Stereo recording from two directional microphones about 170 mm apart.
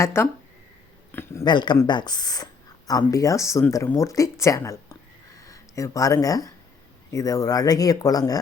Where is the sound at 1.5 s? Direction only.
25° left (ahead or behind).